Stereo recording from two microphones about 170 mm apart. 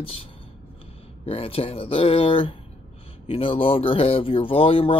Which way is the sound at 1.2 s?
35° left (ahead or behind).